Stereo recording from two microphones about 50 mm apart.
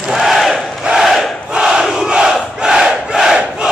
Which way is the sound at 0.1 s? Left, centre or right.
Centre.